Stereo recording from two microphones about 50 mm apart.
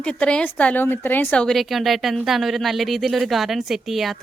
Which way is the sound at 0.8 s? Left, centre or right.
Left.